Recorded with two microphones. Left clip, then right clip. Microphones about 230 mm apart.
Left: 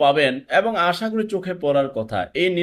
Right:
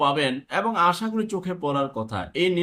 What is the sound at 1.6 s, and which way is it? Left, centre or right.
Speech, centre.